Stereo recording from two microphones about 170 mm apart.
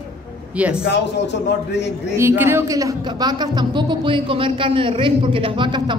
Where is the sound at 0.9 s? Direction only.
90° left.